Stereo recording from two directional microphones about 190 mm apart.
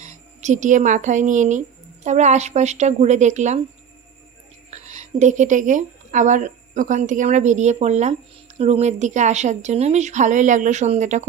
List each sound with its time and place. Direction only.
0.0 s speech: 40° right (ahead or behind)
4.7 s a woman's voice: 40° right (ahead or behind)